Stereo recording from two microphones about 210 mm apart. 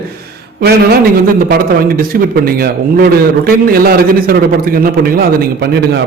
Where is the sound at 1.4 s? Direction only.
45° right (ahead or behind).